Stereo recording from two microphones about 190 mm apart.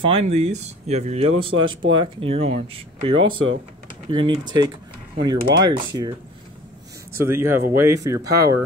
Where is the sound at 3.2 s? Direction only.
90° right.